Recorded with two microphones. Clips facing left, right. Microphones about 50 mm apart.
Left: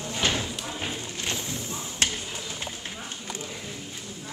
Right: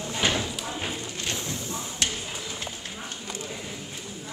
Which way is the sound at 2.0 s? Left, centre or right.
Left.